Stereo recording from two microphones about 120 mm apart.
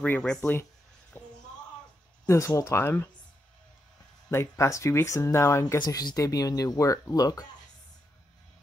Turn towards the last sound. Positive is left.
turn(degrees=30)  # may be behind; listen again after turning